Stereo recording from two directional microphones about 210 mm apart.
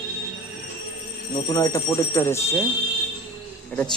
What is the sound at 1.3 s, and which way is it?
Speech, 20° left (ahead or behind).